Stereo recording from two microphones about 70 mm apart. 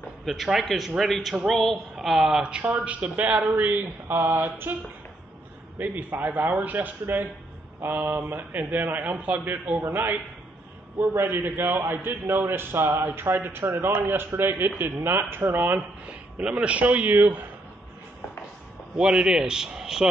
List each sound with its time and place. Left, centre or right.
0.2 s a man's voice: centre; by 4.7 s right
5.8 s a man's voice: right
18.9 s a man's voice: centre